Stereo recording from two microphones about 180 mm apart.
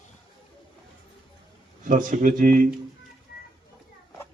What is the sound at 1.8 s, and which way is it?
Speech, 50° right (ahead or behind).